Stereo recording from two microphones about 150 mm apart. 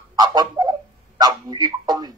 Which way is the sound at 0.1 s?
25° right (ahead or behind).